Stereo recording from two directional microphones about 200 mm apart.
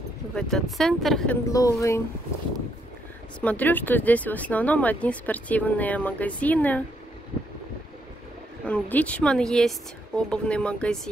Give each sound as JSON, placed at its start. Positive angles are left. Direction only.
{"t": 0.4, "sound": "a woman's voice", "side_deg": 0}
{"t": 1.5, "sound": "speech", "side_deg": 15}
{"t": 3.3, "sound": "speech", "side_deg": 10}
{"t": 8.6, "sound": "a woman's voice", "side_deg": 5}